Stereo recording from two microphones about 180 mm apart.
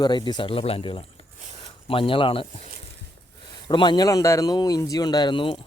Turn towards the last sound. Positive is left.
turn(degrees=30)  # may be behind; listen again after turning